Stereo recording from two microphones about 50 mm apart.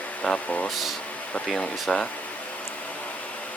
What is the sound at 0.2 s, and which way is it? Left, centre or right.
Speech, centre.